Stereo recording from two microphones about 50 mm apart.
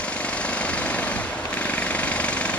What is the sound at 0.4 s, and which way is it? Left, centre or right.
Jackhammer, left.